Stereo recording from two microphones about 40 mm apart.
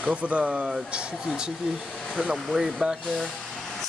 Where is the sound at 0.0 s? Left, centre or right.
Right.